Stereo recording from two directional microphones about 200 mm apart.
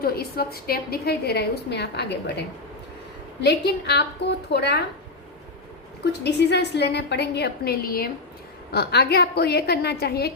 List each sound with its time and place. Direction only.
0.0 s a woman's voice: 50° left (ahead or behind)
3.4 s a woman's voice: 55° left (ahead or behind)
6.2 s a woman's voice: 55° left (ahead or behind)